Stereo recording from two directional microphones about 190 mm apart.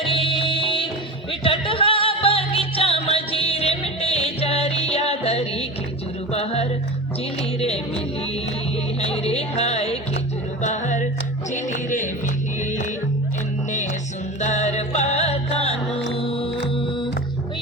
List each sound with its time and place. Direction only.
0.0 s music: 30° left (ahead or behind)
9.0 s speech: 30° left (ahead or behind)
10.6 s music: 40° left (ahead or behind)
14.4 s music: 35° left (ahead or behind)